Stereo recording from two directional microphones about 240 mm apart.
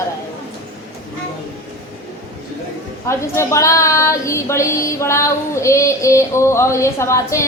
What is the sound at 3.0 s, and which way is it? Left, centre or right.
Child singing, centre.